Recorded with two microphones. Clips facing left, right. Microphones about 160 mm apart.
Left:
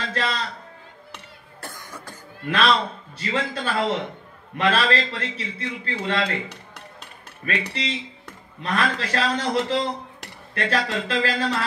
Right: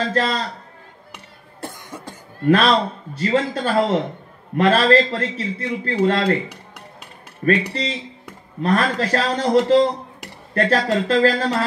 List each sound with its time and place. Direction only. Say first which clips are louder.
0.0 s a sound: right 6 dB; 40° right (ahead or behind)
1.1 s cough: right 1 dB; 20° right (ahead or behind)
2.4 s a man's voice: right 6 dB; 40° right (ahead or behind)
7.7 s a man's voice: right 3 dB; 40° right (ahead or behind)